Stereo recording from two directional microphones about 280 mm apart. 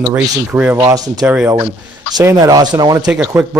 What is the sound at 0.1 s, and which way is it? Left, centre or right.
A man's voice, centre.